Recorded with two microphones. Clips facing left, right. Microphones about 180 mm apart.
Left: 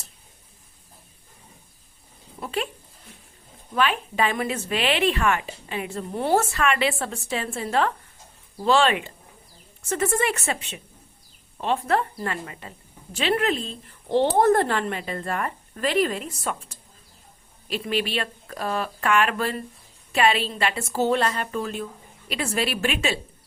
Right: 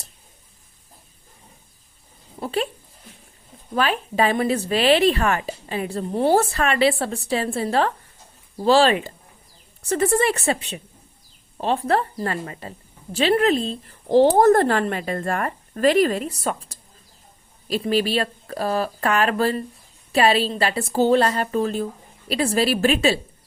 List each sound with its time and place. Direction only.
2.4 s speech: 35° right (ahead or behind)
3.8 s a woman's voice: 35° right (ahead or behind)